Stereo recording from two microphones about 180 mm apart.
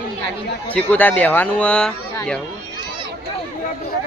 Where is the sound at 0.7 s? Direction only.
10° left (ahead or behind).